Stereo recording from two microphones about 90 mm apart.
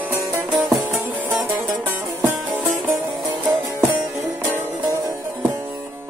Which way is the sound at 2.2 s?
25° right (ahead or behind).